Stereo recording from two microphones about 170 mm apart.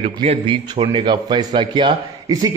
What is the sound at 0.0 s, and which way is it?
A man's voice, 40° right (ahead or behind).